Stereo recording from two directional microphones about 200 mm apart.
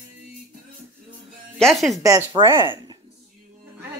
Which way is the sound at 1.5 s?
Centre (ahead or behind).